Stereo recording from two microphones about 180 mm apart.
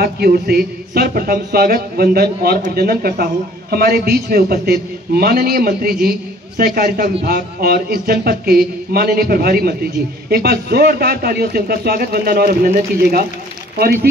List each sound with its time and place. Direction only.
0.0 s a man's voice: 60° right (ahead or behind)